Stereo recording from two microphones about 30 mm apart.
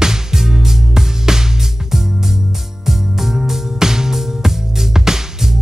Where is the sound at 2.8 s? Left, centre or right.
Centre.